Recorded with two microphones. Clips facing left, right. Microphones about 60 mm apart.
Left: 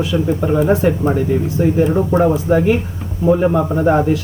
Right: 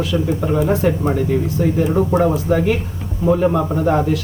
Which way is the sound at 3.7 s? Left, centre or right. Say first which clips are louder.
Left 3 dB; left.